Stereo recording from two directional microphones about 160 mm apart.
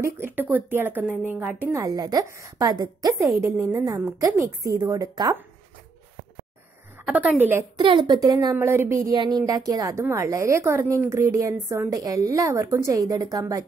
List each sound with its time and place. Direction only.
0.0 s speech: 15° right (ahead or behind)
7.1 s speech: 10° right (ahead or behind)
7.8 s speech: 30° right (ahead or behind)